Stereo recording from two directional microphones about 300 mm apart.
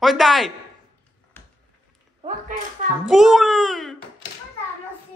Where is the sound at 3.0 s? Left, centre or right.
Centre.